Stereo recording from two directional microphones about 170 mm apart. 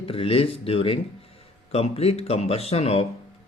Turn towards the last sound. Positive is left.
turn(degrees=35)  # may be behind; listen again after turning